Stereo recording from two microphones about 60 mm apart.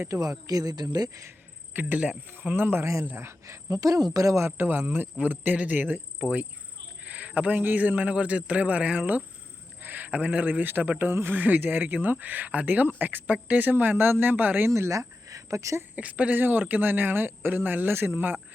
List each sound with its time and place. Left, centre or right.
0.1 s speech: right
1.7 s speech: right
3.4 s speech: right
4.4 s a man's voice: right
14.7 s speech: right
16.0 s a man's voice: right
16.4 s speech: right